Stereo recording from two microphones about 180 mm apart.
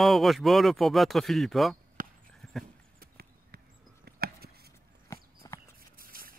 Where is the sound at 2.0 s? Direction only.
50° right (ahead or behind).